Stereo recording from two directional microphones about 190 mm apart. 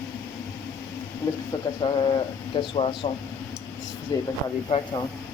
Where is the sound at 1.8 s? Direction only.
25° left (ahead or behind).